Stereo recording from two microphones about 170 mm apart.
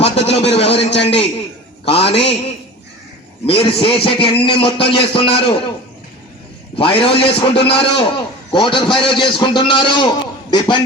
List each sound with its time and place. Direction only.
0.0 s a man's voice: 35° left (ahead or behind)
3.4 s a man's voice: 30° left (ahead or behind)
6.7 s a man's voice: 30° left (ahead or behind)